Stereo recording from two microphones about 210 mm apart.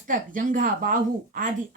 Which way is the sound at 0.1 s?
40° right (ahead or behind).